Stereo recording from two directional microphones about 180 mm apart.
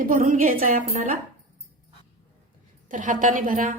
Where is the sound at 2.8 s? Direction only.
45° right (ahead or behind).